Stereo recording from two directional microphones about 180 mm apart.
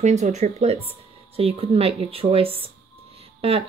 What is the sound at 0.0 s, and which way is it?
A woman's voice, 40° right (ahead or behind).